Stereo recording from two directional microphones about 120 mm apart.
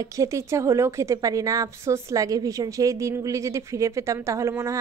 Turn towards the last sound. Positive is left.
turn(degrees=-25)  # may be behind; listen again after turning